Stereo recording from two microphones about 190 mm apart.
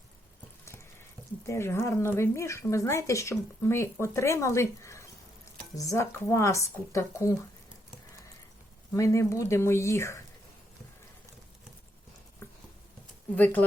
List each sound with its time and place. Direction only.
1.5 s speech: 15° left (ahead or behind)
8.9 s speech: 15° left (ahead or behind)
12.4 s patter: 15° left (ahead or behind)
13.3 s speech: 10° left (ahead or behind)